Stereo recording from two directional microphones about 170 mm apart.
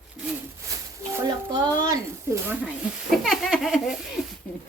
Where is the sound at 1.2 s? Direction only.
20° right (ahead or behind).